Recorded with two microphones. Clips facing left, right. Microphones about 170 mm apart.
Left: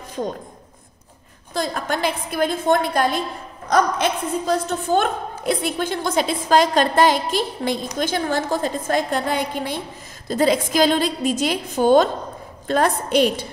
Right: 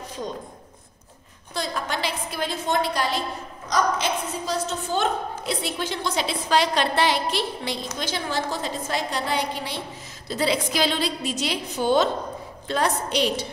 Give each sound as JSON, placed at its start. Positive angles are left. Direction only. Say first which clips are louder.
{"t": 1.5, "sound": "a woman's voice", "louder": "left 5 dB", "side_deg": 50}